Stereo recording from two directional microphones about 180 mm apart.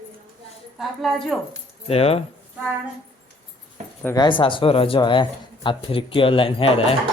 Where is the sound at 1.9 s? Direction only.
35° left (ahead or behind).